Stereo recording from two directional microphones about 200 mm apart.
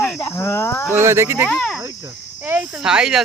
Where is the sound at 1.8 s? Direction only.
15° right (ahead or behind).